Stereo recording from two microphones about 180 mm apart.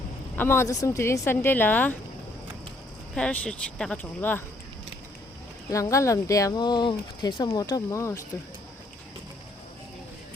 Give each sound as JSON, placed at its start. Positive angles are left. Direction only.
{"t": 0.3, "sound": "speech", "side_deg": 15}
{"t": 3.2, "sound": "speech", "side_deg": 5}
{"t": 5.7, "sound": "speech", "side_deg": 15}